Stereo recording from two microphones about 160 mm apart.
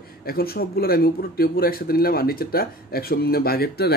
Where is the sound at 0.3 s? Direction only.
70° left (ahead or behind).